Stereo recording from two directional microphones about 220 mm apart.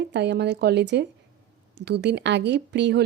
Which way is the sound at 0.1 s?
50° right (ahead or behind).